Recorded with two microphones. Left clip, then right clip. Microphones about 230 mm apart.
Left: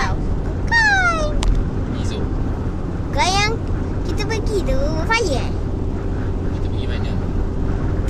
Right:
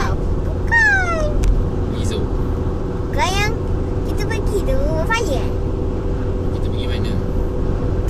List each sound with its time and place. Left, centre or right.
0.7 s cat: centre
3.2 s vehicle: centre
4.6 s vehicle: centre